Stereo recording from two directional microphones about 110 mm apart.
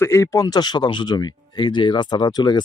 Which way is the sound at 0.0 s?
25° left (ahead or behind).